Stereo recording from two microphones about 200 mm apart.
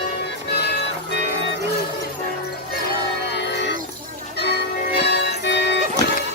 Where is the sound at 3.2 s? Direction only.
55° left (ahead or behind).